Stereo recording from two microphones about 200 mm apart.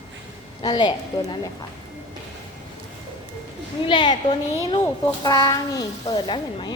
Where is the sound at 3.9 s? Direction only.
20° left (ahead or behind).